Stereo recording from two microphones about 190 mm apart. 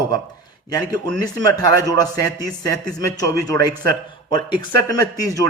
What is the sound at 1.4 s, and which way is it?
A man's voice, 20° left (ahead or behind).